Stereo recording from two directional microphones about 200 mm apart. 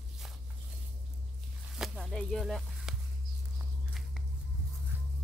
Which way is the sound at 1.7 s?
Centre (ahead or behind).